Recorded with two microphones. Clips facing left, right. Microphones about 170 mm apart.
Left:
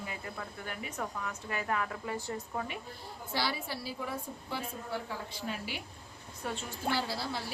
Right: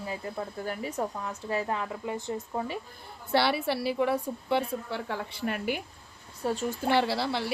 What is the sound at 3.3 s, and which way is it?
A woman's voice, 65° right (ahead or behind).